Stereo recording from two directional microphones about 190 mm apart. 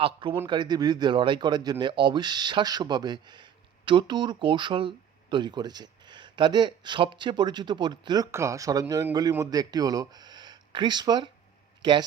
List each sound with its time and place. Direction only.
0.0 s speech: 25° right (ahead or behind)